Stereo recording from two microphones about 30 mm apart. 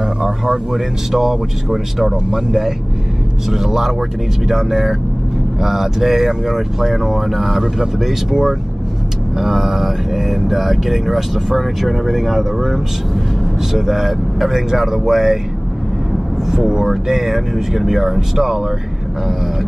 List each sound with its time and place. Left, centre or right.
0.0 s a sound: right
0.7 s speech: centre
16.4 s speech: centre